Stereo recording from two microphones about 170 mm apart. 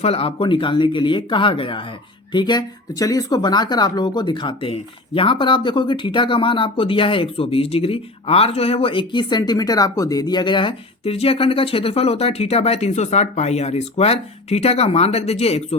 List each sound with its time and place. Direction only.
0.0 s speech: 35° left (ahead or behind)